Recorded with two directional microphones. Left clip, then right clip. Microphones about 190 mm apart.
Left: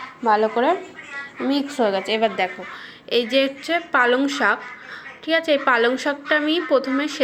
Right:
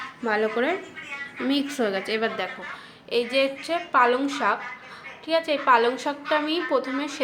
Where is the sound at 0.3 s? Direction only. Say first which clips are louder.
Left 3 dB; 10° left (ahead or behind).